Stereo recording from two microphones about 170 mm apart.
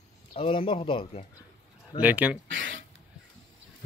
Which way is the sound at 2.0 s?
10° right (ahead or behind).